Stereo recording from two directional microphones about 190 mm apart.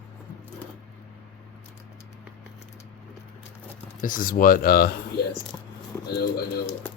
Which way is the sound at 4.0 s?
45° left (ahead or behind).